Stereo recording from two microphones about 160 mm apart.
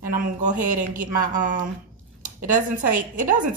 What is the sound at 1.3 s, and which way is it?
Speech, 55° right (ahead or behind).